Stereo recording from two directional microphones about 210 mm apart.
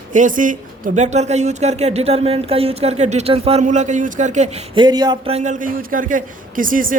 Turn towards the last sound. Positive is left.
turn(degrees=-40)  # may be behind; listen again after turning